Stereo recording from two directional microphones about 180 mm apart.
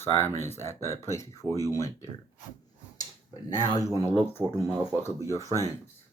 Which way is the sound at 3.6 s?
20° left (ahead or behind).